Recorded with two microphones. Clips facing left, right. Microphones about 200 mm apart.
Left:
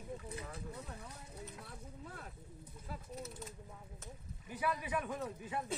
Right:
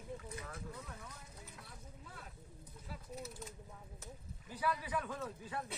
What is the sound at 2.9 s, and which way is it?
Speech, 50° left (ahead or behind).